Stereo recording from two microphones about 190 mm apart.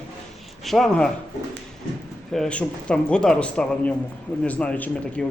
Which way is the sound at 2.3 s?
5° left (ahead or behind).